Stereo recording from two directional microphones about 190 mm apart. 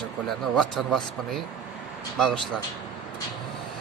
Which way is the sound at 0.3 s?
Centre (ahead or behind).